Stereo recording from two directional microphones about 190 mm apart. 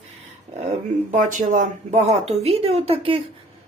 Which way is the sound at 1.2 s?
40° right (ahead or behind).